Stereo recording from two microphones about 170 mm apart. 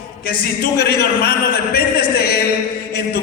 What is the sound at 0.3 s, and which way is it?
A man's voice, 65° left (ahead or behind).